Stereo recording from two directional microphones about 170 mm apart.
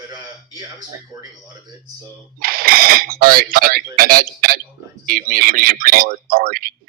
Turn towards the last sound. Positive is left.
turn(degrees=-60)  # may be behind; listen again after turning